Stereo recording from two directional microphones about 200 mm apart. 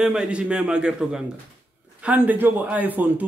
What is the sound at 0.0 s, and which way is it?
A man's voice, 5° right (ahead or behind).